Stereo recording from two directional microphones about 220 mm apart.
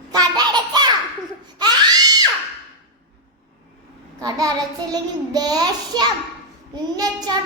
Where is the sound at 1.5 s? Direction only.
20° right (ahead or behind).